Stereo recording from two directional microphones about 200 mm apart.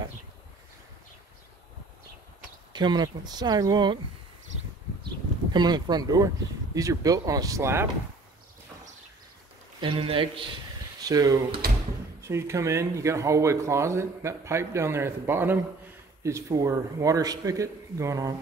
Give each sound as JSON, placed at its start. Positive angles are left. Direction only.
{"t": 2.7, "sound": "speech", "side_deg": -20}
{"t": 5.5, "sound": "speech", "side_deg": -20}
{"t": 9.8, "sound": "speech", "side_deg": -25}